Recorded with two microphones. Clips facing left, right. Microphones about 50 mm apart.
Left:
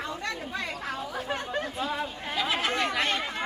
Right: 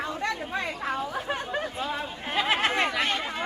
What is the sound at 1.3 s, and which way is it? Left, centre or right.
Chatter, centre.